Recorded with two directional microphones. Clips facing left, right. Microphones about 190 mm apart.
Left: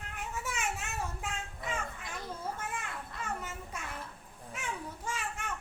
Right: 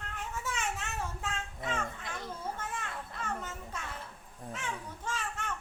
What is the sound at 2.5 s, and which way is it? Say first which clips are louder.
Children playing: even; 10° left (ahead or behind).